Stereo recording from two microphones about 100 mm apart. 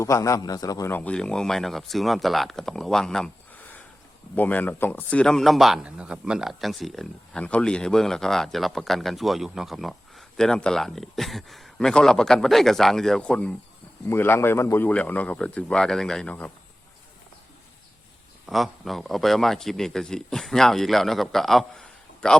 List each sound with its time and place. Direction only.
0.0 s a man's voice: 30° left (ahead or behind)
0.9 s speech: 15° left (ahead or behind)
4.4 s speech: 15° left (ahead or behind)
14.1 s speech: 25° left (ahead or behind)
14.8 s speech: 15° left (ahead or behind)
18.4 s speech: centre (ahead or behind)